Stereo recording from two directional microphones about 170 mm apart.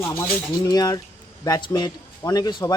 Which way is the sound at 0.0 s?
15° left (ahead or behind).